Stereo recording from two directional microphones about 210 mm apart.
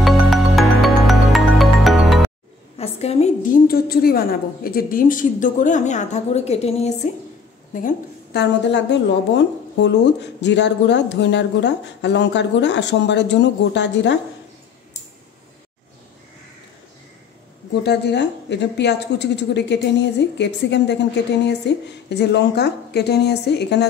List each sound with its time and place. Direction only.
0.0 s music: centre (ahead or behind)
2.8 s a woman's voice: 30° left (ahead or behind)
3.6 s a woman's voice: 45° left (ahead or behind)
7.7 s a woman's voice: 45° left (ahead or behind)
17.8 s a woman's voice: 55° left (ahead or behind)